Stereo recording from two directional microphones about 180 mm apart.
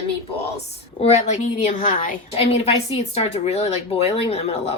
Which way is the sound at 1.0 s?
40° left (ahead or behind).